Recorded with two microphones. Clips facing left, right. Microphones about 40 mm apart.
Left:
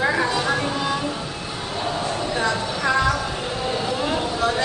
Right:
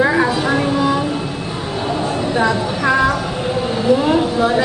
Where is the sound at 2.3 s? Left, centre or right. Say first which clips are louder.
Right 7 dB; centre.